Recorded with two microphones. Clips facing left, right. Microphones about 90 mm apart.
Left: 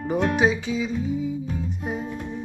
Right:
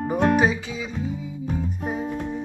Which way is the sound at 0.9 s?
35° right (ahead or behind).